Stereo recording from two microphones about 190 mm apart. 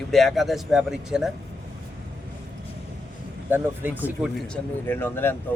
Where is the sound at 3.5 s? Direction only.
10° right (ahead or behind); by 5.4 s 10° left (ahead or behind).